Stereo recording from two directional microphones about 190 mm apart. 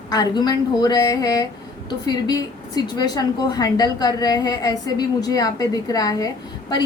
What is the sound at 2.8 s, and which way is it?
A woman's voice, 20° left (ahead or behind).